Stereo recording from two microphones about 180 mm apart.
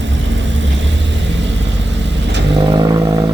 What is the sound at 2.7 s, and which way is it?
Vehicle, 20° right (ahead or behind).